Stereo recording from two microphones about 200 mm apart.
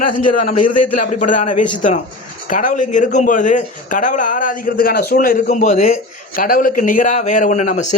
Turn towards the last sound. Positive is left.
turn(degrees=35)  # may be behind; listen again after turning